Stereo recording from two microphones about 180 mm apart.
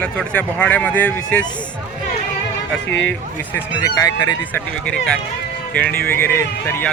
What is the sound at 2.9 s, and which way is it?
Speech, 90° left.